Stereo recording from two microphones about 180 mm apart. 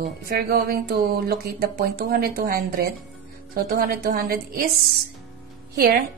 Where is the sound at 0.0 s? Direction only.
55° right (ahead or behind).